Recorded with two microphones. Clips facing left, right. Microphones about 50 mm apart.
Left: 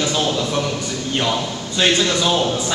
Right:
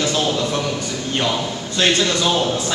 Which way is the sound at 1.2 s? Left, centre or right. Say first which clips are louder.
Even; centre.